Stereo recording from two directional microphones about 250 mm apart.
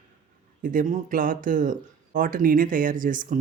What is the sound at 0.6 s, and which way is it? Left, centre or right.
Speech, right.